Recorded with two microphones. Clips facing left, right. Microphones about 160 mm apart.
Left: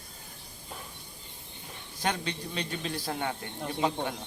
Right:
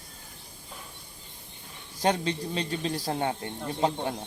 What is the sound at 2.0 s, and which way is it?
Speech, 35° right (ahead or behind).